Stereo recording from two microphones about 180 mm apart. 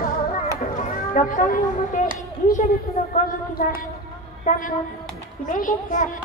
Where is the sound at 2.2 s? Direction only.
50° left (ahead or behind).